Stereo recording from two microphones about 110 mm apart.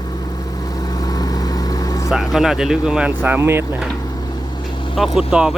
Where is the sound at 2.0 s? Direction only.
5° right (ahead or behind).